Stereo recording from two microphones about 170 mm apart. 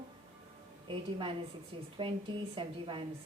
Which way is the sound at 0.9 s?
30° right (ahead or behind).